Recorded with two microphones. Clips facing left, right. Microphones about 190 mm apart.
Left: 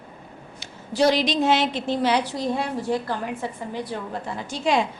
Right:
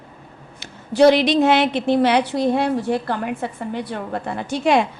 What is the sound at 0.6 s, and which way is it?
A woman's voice, 60° right (ahead or behind).